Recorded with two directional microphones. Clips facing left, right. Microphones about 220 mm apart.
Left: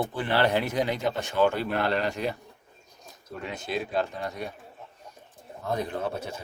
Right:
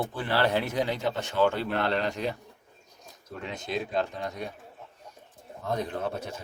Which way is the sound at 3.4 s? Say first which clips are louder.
Left 1 dB; 5° left (ahead or behind).